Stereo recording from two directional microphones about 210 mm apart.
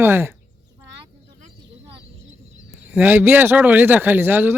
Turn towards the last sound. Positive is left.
turn(degrees=-10)  # may be behind; listen again after turning